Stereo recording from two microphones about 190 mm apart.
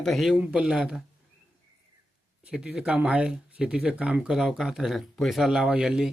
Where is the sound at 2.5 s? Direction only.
5° right (ahead or behind).